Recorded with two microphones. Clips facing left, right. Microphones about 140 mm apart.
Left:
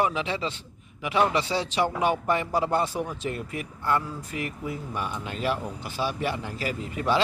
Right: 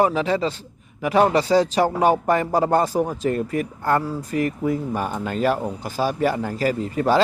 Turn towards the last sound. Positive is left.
turn(degrees=-40)  # may be behind; listen again after turning